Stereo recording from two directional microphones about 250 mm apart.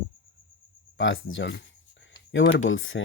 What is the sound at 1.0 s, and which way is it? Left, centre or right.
Speech, left.